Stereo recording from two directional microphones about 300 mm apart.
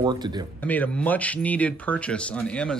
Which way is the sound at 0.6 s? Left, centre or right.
Centre.